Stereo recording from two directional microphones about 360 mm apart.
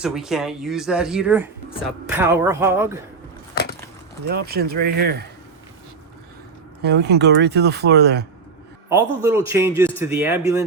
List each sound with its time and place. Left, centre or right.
0.0 s a man's voice: centre
3.5 s wood: left
4.3 s speech: right
6.8 s speech: right
8.9 s a man's voice: centre